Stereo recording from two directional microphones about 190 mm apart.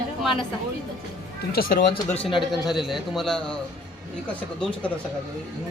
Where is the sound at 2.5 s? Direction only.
Centre (ahead or behind).